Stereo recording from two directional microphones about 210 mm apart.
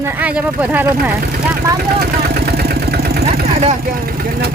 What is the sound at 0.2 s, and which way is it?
Speech, 5° right (ahead or behind).